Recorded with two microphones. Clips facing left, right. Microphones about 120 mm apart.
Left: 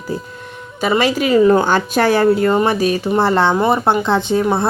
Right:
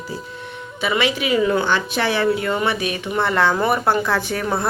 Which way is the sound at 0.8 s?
40° left (ahead or behind).